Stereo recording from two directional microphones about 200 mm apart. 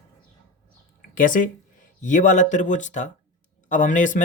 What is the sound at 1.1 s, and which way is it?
Speech, 40° left (ahead or behind).